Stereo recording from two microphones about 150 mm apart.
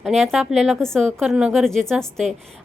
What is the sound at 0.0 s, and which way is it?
A woman's voice, centre (ahead or behind).